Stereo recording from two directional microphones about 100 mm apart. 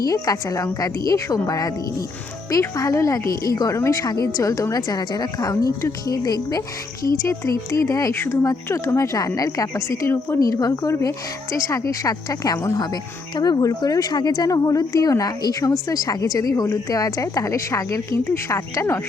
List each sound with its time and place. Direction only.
0.0 s speech: 35° left (ahead or behind)
10.4 s speech: 35° left (ahead or behind)